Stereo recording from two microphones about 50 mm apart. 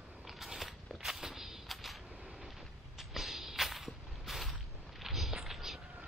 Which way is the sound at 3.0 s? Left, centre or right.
Centre.